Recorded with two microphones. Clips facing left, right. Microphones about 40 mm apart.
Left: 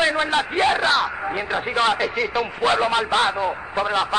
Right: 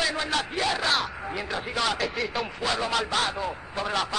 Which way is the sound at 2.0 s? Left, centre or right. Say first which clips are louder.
Left 6 dB; centre.